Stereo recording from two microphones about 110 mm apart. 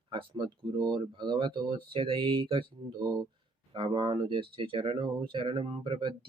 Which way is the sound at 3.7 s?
45° right (ahead or behind).